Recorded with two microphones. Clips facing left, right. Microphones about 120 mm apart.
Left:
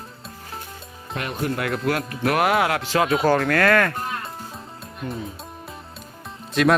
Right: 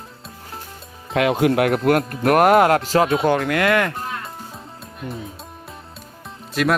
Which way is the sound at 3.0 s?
25° right (ahead or behind).